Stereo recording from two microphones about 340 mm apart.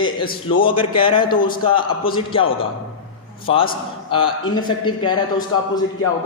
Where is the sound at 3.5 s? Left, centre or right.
Centre.